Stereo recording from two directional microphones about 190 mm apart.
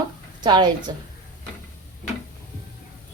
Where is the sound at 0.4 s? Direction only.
25° right (ahead or behind).